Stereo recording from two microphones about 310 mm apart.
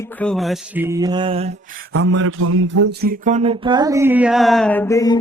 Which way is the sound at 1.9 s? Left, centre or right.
Right.